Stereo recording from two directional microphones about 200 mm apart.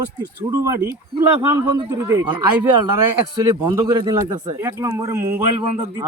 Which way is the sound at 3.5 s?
25° right (ahead or behind).